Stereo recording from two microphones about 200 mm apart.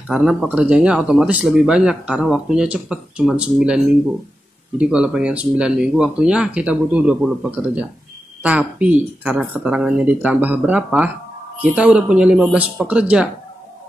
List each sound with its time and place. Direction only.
0.1 s speech: 5° right (ahead or behind)